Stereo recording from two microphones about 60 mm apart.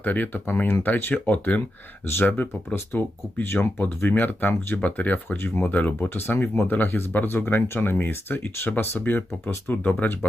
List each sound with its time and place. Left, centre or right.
0.0 s speech: left